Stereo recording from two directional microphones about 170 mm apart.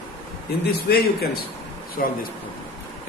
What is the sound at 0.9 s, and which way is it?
Speech, 70° left (ahead or behind).